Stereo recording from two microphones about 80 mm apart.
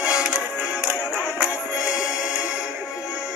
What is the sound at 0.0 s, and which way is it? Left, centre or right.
Music, centre.